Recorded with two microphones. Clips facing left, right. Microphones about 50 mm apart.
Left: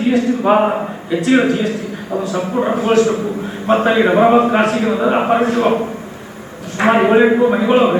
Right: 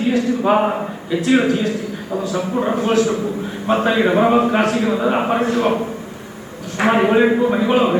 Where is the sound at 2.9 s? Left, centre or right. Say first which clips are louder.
Left 5 dB; centre.